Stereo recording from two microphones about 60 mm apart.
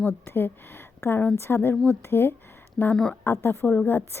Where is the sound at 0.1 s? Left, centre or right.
Left.